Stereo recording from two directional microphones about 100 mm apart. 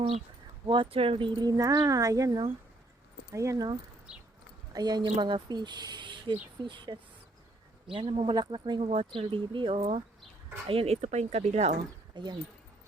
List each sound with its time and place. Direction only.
0.7 s speech: 65° right (ahead or behind); by 3.7 s 35° right (ahead or behind)
4.7 s speech: 40° right (ahead or behind); by 8.3 s 65° right (ahead or behind)
8.3 s speech: 50° right (ahead or behind)
8.8 s speech: 75° right (ahead or behind)
9.1 s speech: 55° right (ahead or behind)
10.7 s speech: 80° right
12.1 s speech: 45° right (ahead or behind)